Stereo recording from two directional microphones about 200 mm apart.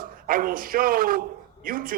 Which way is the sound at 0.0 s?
45° right (ahead or behind).